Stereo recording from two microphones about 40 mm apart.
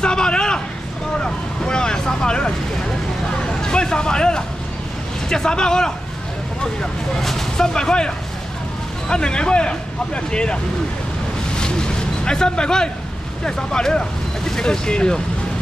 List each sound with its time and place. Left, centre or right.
0.0 s hubbub: left
1.2 s speech: centre
3.6 s speech: centre
7.2 s speech: centre
9.1 s speech: left
11.5 s a sound: left
13.4 s speech: centre